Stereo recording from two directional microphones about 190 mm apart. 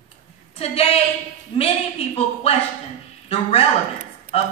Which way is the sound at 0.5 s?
30° left (ahead or behind).